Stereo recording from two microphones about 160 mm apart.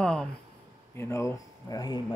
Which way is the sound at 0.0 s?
5° left (ahead or behind).